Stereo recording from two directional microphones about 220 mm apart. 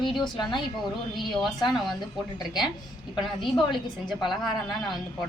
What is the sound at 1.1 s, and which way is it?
Speech, centre (ahead or behind).